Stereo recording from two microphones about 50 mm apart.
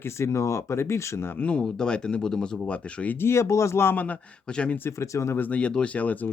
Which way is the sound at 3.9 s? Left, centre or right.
Left.